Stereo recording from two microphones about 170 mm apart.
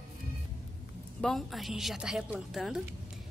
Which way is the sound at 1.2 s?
Centre (ahead or behind).